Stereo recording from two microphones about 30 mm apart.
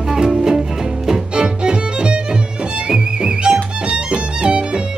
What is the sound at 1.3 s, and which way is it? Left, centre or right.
Music, right.